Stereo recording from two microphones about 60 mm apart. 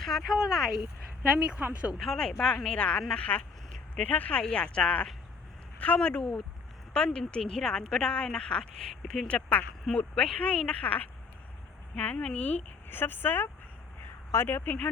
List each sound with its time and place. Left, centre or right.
0.0 s a sound: centre
0.3 s speech: centre
1.2 s speech: centre
2.4 s a woman's voice: centre; by 14.8 s left